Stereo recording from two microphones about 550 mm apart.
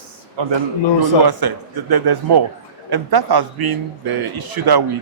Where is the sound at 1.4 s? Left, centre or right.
Right.